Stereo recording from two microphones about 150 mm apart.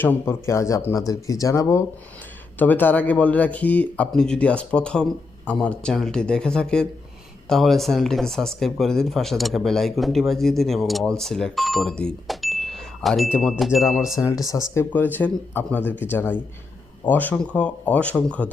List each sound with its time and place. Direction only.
0.0 s speech: 15° left (ahead or behind)
14.1 s speech: 20° left (ahead or behind)